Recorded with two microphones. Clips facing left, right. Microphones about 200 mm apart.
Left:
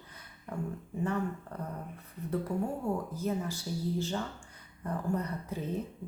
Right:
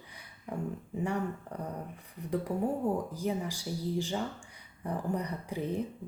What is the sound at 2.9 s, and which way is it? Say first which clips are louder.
Speech: right 1 dB; 15° right (ahead or behind).